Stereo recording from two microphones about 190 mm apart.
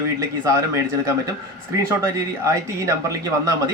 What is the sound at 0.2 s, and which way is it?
Speech, 15° right (ahead or behind).